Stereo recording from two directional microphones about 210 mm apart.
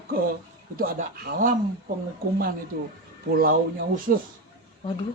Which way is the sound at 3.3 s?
45° right (ahead or behind).